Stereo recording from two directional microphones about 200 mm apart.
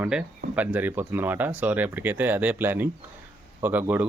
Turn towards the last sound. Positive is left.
turn(degrees=-10)  # may be behind; listen again after turning